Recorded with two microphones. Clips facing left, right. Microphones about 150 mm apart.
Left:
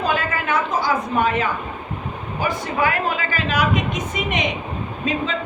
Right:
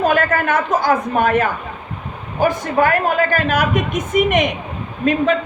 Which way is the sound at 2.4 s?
50° right (ahead or behind).